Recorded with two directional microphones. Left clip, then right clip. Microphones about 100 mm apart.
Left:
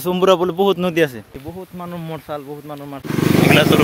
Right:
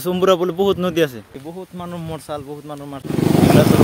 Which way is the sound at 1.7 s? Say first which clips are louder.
Left 1 dB; 10° right (ahead or behind).